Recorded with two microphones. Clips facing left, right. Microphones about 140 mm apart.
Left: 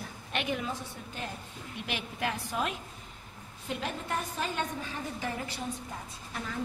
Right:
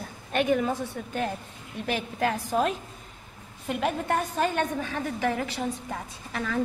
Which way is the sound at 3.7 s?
60° right (ahead or behind).